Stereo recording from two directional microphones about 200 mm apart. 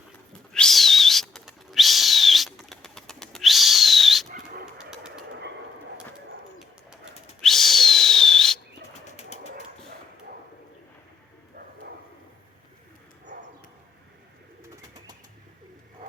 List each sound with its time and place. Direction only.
0.5 s a sound: centre (ahead or behind)
7.4 s whistle: centre (ahead or behind)
8.9 s bird flight: 35° left (ahead or behind)